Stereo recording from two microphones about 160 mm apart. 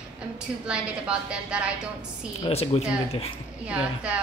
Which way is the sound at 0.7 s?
5° right (ahead or behind).